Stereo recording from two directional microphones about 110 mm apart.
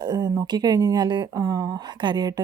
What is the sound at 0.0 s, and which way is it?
Speech, 40° right (ahead or behind).